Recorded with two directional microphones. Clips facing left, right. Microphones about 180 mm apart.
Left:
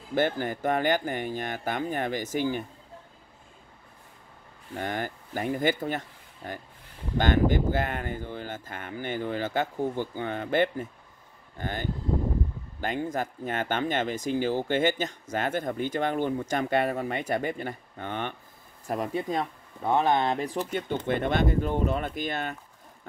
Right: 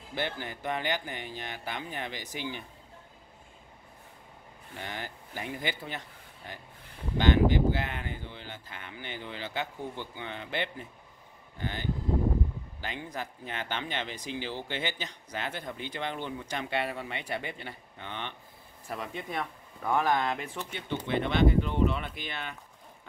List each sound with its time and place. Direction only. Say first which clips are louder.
0.1 s speech: left 9 dB; 45° left (ahead or behind)
4.7 s speech: left 8 dB; 50° left (ahead or behind)